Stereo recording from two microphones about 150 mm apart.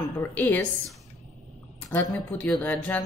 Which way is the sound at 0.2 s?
15° left (ahead or behind).